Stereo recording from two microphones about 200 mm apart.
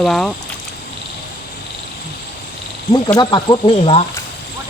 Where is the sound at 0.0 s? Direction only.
Centre (ahead or behind).